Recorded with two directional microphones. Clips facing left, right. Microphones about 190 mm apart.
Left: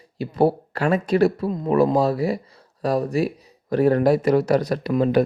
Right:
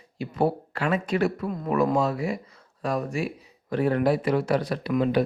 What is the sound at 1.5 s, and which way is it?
Speech, 25° left (ahead or behind).